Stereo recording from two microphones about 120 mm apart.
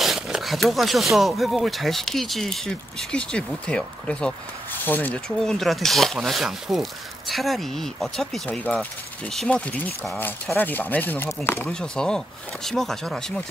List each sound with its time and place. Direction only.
0.0 s speech: centre (ahead or behind); by 5.2 s 15° left (ahead or behind)
5.4 s speech: 5° left (ahead or behind); by 11.7 s 20° left (ahead or behind)
11.7 s speech: 5° left (ahead or behind)